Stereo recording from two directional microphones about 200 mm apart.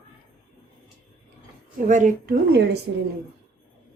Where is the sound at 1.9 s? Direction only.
40° right (ahead or behind).